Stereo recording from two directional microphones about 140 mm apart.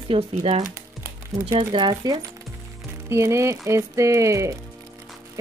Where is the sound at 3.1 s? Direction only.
20° right (ahead or behind).